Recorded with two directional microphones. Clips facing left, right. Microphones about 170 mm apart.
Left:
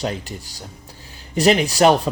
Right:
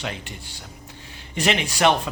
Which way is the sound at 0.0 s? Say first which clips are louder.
Left 6 dB; 40° left (ahead or behind).